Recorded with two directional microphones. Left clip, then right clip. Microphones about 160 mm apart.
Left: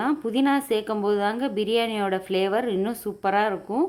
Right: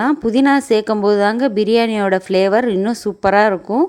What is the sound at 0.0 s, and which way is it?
A woman's voice, 40° right (ahead or behind).